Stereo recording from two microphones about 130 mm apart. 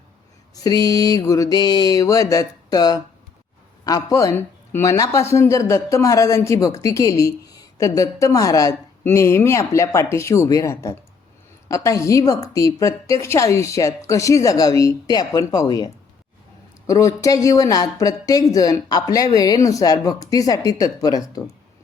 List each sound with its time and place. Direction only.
0.5 s speech: 30° left (ahead or behind)